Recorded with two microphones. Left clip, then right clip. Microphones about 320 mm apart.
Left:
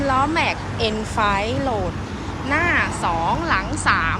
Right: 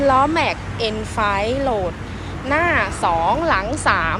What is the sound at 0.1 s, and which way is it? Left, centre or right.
Speech, centre.